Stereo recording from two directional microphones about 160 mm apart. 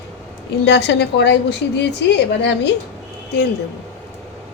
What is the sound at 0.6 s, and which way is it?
A woman's voice, 90° left.